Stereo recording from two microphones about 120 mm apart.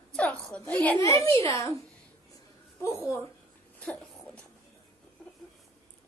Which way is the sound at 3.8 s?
10° left (ahead or behind).